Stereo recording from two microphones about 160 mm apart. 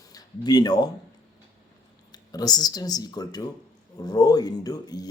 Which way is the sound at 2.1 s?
25° left (ahead or behind).